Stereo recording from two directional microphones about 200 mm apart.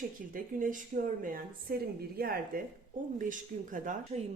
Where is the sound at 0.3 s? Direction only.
45° right (ahead or behind).